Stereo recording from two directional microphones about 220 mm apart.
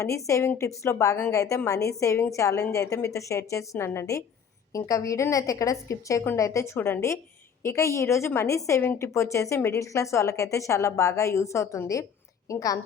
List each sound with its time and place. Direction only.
0.0 s a woman's voice: 15° left (ahead or behind)